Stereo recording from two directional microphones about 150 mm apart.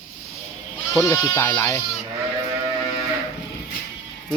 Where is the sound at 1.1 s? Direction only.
20° left (ahead or behind).